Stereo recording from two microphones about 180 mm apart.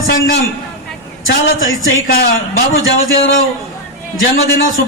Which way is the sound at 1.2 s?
90° left.